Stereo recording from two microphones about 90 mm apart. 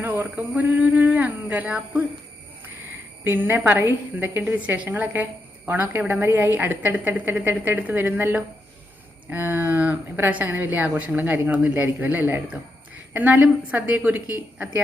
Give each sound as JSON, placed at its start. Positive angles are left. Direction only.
{"t": 0.0, "sound": "a woman's voice", "side_deg": -20}
{"t": 3.2, "sound": "a woman's voice", "side_deg": -25}